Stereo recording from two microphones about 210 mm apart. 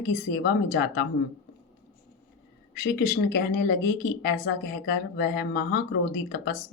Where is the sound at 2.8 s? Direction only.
45° left (ahead or behind).